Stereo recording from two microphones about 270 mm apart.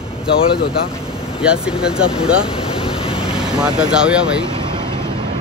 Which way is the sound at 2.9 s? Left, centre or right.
Centre.